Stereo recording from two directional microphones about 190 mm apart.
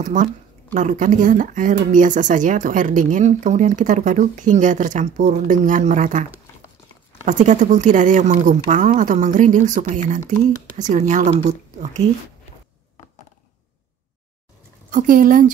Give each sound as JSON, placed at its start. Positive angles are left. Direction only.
{"t": 0.0, "sound": "speech", "side_deg": -40}
{"t": 7.2, "sound": "speech", "side_deg": -40}
{"t": 14.9, "sound": "speech", "side_deg": -45}